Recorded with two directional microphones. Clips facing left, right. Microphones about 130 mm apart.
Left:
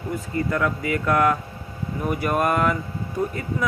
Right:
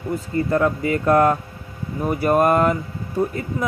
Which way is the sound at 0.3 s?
35° right (ahead or behind).